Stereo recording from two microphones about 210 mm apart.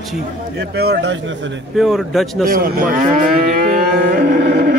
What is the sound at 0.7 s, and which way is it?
Speech, 50° right (ahead or behind).